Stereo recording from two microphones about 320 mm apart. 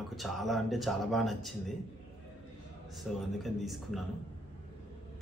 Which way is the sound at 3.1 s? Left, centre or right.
Centre.